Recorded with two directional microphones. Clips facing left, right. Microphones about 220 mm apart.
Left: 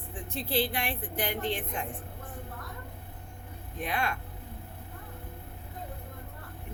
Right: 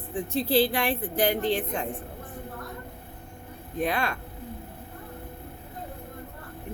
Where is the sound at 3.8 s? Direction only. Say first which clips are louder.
Right 4 dB; 35° right (ahead or behind).